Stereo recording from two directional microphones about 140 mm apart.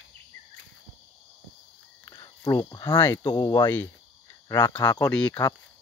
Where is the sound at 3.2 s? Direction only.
30° left (ahead or behind).